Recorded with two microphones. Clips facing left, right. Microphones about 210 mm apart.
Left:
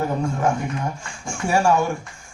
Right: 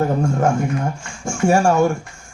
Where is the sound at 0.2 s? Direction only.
45° right (ahead or behind).